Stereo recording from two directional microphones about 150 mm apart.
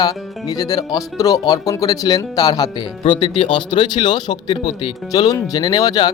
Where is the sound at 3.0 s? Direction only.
35° left (ahead or behind).